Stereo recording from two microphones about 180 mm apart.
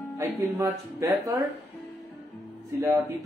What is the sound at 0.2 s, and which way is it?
Speech, 15° right (ahead or behind).